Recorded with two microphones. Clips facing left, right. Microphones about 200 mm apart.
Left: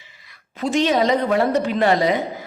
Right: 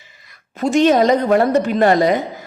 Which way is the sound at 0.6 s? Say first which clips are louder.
Right 5 dB; 50° right (ahead or behind).